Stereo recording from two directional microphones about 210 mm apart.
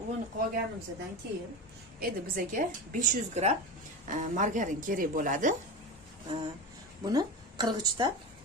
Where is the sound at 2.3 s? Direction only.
40° right (ahead or behind).